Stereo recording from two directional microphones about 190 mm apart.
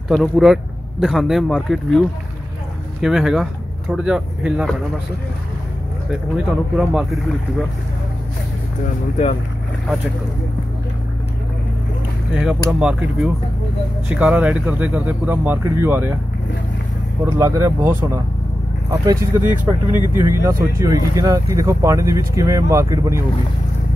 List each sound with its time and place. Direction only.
0.1 s speech: centre (ahead or behind)
6.0 s speech: 5° right (ahead or behind)
12.4 s speech: 5° right (ahead or behind)
17.4 s speech: 15° right (ahead or behind)